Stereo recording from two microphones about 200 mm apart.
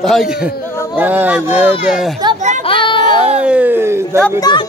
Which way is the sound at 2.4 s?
35° right (ahead or behind).